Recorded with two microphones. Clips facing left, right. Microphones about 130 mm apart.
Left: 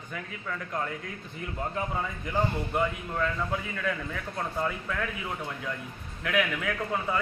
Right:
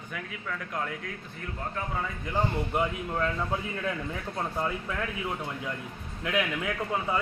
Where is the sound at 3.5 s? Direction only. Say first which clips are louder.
Even; 25° right (ahead or behind).